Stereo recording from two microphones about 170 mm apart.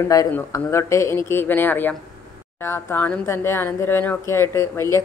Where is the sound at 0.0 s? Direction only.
15° left (ahead or behind).